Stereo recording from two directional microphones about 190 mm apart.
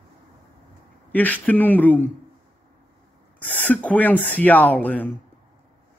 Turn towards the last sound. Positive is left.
turn(degrees=10)  # may be behind; listen again after turning